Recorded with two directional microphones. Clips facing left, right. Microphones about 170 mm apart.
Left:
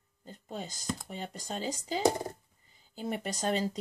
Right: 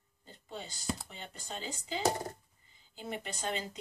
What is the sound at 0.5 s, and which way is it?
Speech, 45° left (ahead or behind).